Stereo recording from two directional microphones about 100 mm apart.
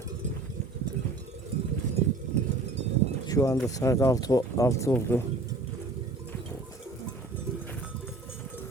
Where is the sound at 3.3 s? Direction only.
35° left (ahead or behind).